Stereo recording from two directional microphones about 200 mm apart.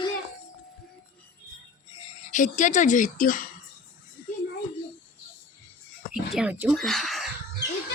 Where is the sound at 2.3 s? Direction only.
40° left (ahead or behind).